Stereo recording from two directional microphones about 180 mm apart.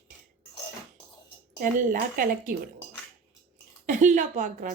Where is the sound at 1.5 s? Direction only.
45° right (ahead or behind).